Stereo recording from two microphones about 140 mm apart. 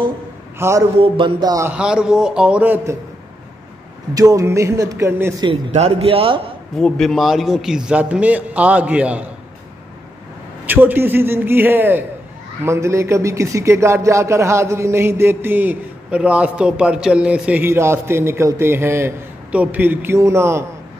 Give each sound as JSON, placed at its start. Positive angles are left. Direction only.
{"t": 0.6, "sound": "a man's voice", "side_deg": -20}
{"t": 0.9, "sound": "speech", "side_deg": -40}
{"t": 1.7, "sound": "speech", "side_deg": -5}
{"t": 4.1, "sound": "speech", "side_deg": -25}
{"t": 5.7, "sound": "speech", "side_deg": -50}
{"t": 6.8, "sound": "speech", "side_deg": 0}
{"t": 10.7, "sound": "speech", "side_deg": -15}